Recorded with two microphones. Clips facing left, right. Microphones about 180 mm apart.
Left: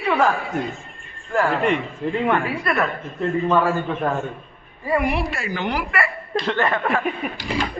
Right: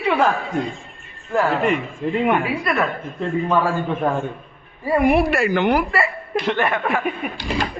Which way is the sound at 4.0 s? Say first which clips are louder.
Right 2 dB; 10° right (ahead or behind).